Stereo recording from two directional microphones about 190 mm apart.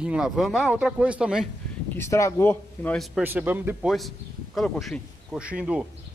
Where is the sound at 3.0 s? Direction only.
5° right (ahead or behind).